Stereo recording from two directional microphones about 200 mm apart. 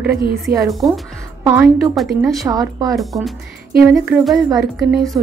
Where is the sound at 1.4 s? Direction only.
10° right (ahead or behind).